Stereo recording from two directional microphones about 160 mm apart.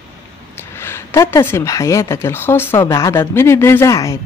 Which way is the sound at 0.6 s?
15° left (ahead or behind).